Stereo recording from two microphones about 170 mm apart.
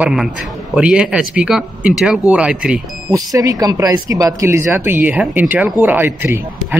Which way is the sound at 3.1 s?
20° right (ahead or behind).